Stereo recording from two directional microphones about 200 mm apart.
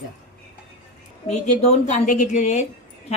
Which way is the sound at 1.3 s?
35° left (ahead or behind).